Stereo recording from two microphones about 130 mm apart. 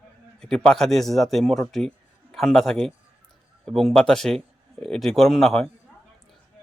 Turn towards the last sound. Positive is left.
turn(degrees=5)  # may be behind; listen again after turning